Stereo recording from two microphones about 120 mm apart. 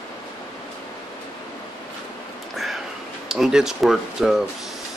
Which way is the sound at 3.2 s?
5° right (ahead or behind).